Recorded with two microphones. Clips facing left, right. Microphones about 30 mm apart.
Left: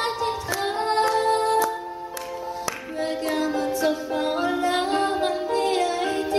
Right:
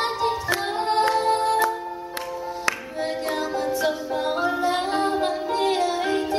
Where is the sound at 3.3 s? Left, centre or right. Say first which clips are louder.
Left 1 dB; centre.